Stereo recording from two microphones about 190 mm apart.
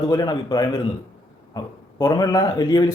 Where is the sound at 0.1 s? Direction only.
20° left (ahead or behind).